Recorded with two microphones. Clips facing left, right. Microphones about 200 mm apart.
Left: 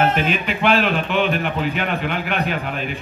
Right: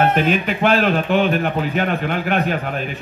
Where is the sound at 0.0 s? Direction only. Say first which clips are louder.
Right 3 dB; 50° right (ahead or behind).